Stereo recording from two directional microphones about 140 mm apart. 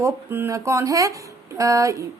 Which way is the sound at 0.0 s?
15° right (ahead or behind).